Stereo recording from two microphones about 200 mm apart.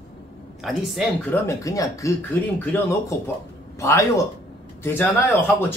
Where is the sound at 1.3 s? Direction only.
15° left (ahead or behind).